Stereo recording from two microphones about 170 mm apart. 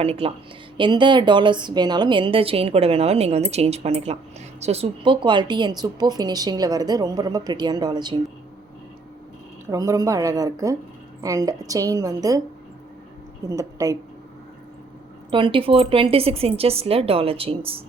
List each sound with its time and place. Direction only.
0.0 s a woman's voice: 35° right (ahead or behind)
9.6 s speech: 20° right (ahead or behind)
13.5 s speech: 20° right (ahead or behind)
15.3 s a woman's voice: 30° right (ahead or behind)